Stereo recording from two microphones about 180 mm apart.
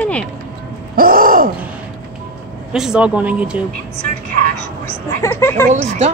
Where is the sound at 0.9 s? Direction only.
50° right (ahead or behind).